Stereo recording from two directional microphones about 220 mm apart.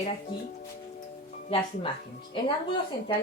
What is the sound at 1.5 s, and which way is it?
Speech, 25° left (ahead or behind).